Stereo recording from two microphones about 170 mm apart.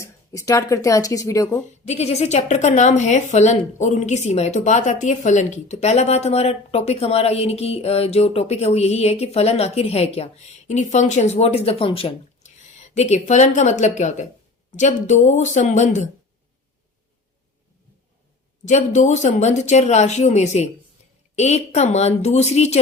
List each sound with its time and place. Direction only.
0.0 s speech: 20° left (ahead or behind)
1.9 s a woman's voice: 40° left (ahead or behind)
18.6 s a woman's voice: 45° left (ahead or behind)